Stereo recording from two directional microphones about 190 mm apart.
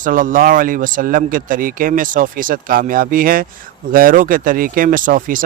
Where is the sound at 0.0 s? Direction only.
45° right (ahead or behind).